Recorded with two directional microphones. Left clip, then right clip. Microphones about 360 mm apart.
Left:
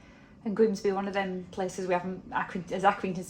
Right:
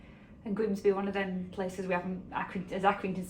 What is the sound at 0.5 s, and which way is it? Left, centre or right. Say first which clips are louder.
A woman's voice: left 3 dB; left.